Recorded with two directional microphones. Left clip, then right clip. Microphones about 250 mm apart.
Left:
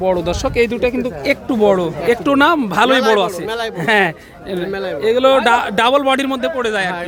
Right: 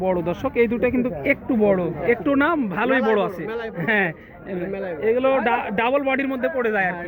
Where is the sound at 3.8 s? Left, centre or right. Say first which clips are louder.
Left 7 dB; centre.